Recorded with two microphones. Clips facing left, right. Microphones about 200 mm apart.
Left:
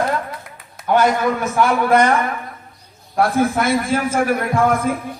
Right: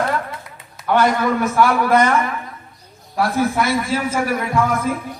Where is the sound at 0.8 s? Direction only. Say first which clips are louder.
Left 1 dB; 55° left (ahead or behind).